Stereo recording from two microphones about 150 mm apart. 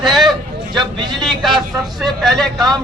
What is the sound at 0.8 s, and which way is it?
Speech, 30° right (ahead or behind).